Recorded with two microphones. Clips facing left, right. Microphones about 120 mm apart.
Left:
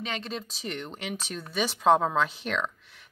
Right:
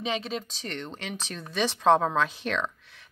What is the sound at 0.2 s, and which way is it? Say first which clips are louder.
Speech: right 1 dB; centre (ahead or behind).